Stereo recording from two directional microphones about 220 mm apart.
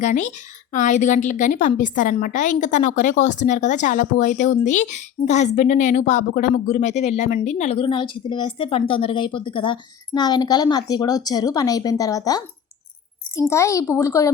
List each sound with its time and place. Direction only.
0.0 s a woman's voice: 35° left (ahead or behind); by 12.4 s 15° left (ahead or behind)
13.5 s a woman's voice: 15° left (ahead or behind)